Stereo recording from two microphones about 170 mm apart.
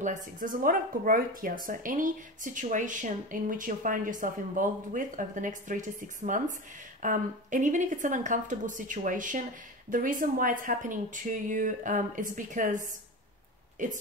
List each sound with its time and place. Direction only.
0.0 s speech: 50° right (ahead or behind)